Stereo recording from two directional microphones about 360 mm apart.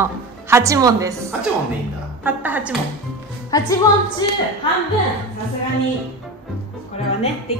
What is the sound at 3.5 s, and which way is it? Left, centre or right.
Speech, centre.